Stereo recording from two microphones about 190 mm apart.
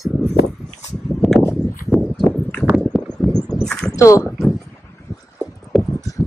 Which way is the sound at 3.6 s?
5° left (ahead or behind).